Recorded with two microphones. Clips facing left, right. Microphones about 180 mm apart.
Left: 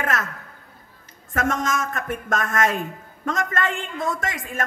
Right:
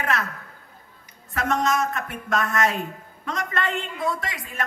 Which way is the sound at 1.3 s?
45° left (ahead or behind).